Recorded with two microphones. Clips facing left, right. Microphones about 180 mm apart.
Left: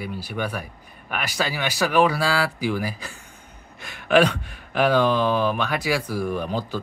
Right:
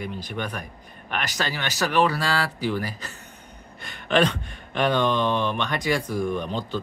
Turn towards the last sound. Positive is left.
turn(degrees=10)  # may be behind; listen again after turning